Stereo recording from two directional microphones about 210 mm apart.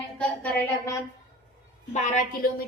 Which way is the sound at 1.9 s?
40° left (ahead or behind).